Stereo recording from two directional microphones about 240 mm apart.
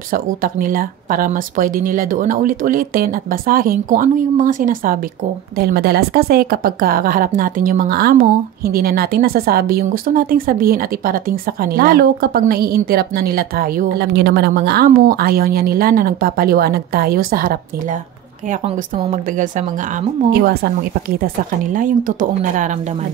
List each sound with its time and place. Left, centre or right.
0.1 s a woman's voice: right
21.7 s a woman's voice: right